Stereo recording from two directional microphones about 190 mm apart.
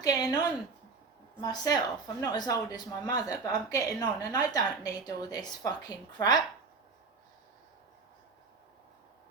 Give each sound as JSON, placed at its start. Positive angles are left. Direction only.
{"t": 0.0, "sound": "speech", "side_deg": 20}